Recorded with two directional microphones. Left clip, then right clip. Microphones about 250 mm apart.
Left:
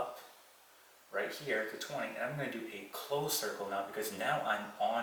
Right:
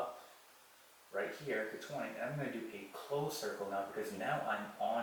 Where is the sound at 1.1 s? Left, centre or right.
Centre.